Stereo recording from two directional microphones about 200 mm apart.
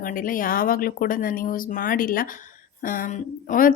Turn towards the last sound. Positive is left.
turn(degrees=40)  # may be behind; listen again after turning